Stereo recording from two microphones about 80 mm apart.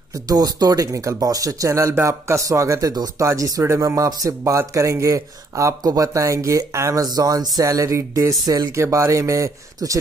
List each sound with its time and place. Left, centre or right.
0.3 s speech: right